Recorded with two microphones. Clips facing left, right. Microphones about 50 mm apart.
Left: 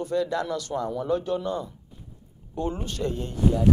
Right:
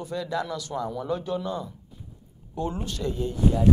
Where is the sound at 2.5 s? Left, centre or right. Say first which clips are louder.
Left 1 dB; left.